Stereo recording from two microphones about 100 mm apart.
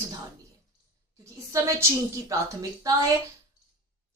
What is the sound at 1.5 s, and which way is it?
Speech, 30° right (ahead or behind).